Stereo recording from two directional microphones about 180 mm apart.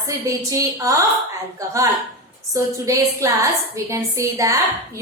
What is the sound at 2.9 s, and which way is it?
A woman's voice, 15° right (ahead or behind).